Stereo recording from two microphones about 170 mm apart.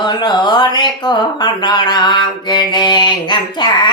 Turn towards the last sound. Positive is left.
turn(degrees=25)  # may be behind; listen again after turning